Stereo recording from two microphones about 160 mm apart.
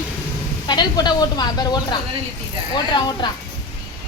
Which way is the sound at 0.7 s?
25° left (ahead or behind).